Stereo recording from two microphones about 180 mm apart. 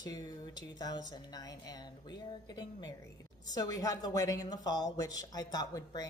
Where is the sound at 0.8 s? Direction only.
20° left (ahead or behind).